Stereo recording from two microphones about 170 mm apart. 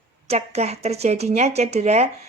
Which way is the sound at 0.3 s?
40° right (ahead or behind).